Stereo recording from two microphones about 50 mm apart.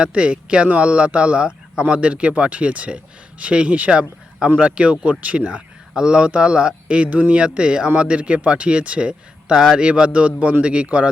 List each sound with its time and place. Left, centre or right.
0.0 s speech: right